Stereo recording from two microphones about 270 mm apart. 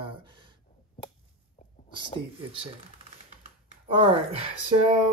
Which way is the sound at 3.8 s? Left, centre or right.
Right.